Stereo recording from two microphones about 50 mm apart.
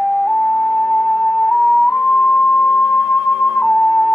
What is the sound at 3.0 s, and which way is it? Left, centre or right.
Flute, left.